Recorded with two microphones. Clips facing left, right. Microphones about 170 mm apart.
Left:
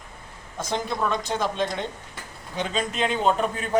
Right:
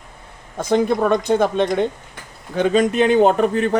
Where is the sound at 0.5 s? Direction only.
55° right (ahead or behind).